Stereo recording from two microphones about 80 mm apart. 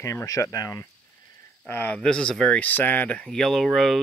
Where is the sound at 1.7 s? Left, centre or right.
Left.